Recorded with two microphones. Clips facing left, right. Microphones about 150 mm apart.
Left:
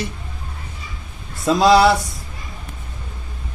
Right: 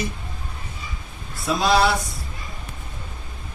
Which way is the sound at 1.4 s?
90° left.